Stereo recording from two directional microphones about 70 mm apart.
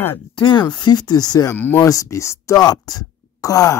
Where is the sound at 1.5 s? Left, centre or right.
Left.